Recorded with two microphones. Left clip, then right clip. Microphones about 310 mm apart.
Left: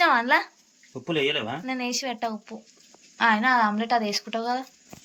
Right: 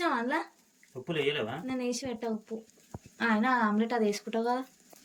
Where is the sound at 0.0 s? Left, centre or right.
Centre.